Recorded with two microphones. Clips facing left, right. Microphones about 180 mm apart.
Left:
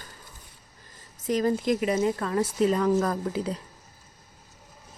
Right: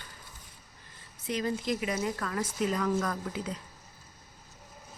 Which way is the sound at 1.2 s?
45° left (ahead or behind).